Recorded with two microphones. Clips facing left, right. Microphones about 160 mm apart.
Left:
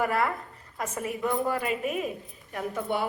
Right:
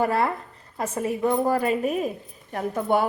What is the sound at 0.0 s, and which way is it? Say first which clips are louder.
A woman's voice: right 4 dB; 30° right (ahead or behind).